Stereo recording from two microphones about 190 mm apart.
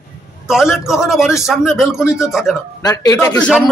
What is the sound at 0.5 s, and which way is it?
A man's voice, centre (ahead or behind).